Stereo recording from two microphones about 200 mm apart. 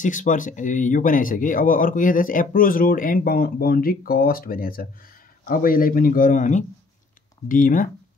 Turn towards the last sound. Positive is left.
turn(degrees=40)  # may be behind; listen again after turning